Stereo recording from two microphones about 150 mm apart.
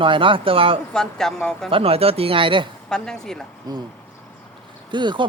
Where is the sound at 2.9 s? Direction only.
5° left (ahead or behind).